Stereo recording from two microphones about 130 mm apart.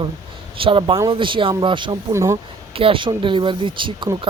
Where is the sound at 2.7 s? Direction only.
45° right (ahead or behind).